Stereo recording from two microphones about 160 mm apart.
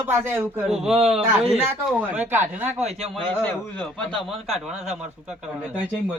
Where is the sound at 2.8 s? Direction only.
40° right (ahead or behind).